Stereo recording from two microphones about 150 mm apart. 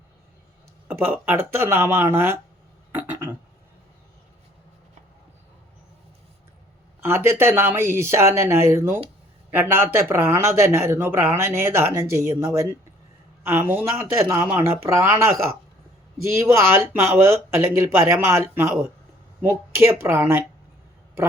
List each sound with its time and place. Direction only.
0.9 s speech: 15° right (ahead or behind)
2.9 s a sound: 15° right (ahead or behind)
7.0 s a man's voice: 15° right (ahead or behind)